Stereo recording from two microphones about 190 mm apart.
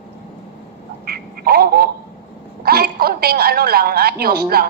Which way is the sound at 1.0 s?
55° right (ahead or behind).